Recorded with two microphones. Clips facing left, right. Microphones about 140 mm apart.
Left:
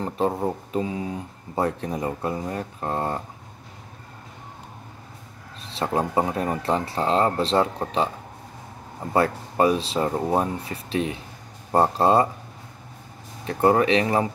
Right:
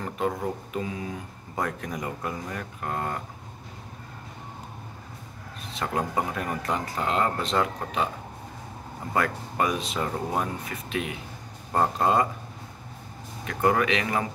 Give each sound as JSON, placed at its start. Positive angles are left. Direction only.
{"t": 0.0, "sound": "speech", "side_deg": 30}
{"t": 5.7, "sound": "speech", "side_deg": 30}
{"t": 9.1, "sound": "speech", "side_deg": 30}
{"t": 13.5, "sound": "speech", "side_deg": 30}